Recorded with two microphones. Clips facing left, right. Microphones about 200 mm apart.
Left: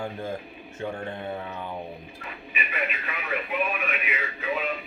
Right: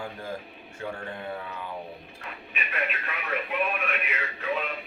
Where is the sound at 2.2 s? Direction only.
Centre (ahead or behind).